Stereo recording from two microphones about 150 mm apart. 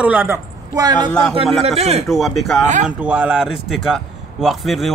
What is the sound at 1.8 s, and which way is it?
Speech, 45° right (ahead or behind).